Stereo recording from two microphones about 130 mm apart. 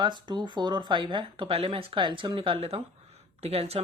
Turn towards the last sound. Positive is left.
turn(degrees=-50)  # may be behind; listen again after turning